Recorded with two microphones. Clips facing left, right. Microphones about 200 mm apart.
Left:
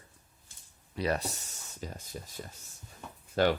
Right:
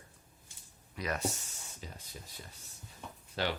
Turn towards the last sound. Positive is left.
turn(degrees=50)  # may be behind; listen again after turning